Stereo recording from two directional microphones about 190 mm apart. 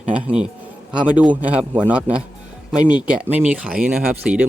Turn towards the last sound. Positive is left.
turn(degrees=-5)  # may be behind; listen again after turning